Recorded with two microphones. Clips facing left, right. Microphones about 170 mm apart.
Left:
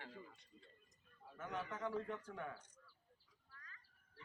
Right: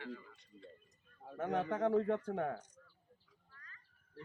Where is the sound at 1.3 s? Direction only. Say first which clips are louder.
Right 11 dB; 65° right (ahead or behind).